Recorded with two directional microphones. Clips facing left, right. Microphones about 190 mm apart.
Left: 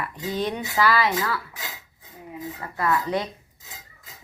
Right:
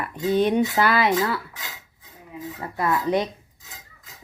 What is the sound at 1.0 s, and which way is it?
Speech, 25° right (ahead or behind).